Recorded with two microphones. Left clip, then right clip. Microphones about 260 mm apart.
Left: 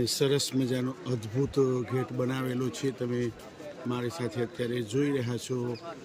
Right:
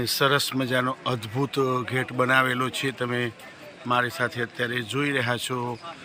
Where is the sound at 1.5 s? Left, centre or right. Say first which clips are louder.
Right 3 dB; centre.